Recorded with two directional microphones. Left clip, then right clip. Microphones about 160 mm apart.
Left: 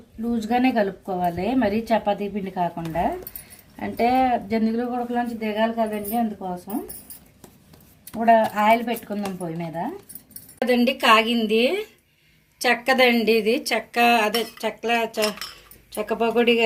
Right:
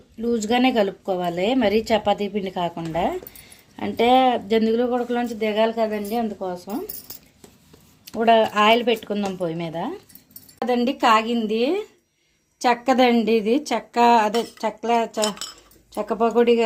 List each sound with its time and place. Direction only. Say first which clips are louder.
0.4 s a woman's voice: right 1 dB; 50° right (ahead or behind)
3.8 s speech: right 3 dB; 40° right (ahead or behind); by 6.5 s 65° right (ahead or behind)
8.2 s a woman's voice: right 1 dB; 55° right (ahead or behind)
12.6 s a woman's voice: even; 80° right